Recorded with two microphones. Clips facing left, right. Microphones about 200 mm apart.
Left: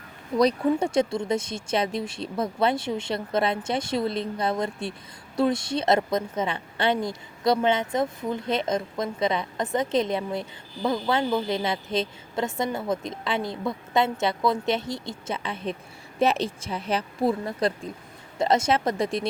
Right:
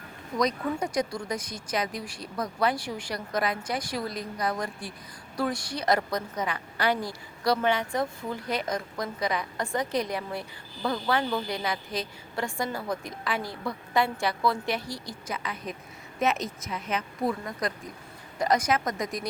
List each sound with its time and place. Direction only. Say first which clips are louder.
0.3 s a woman's voice: left 6 dB; 30° left (ahead or behind)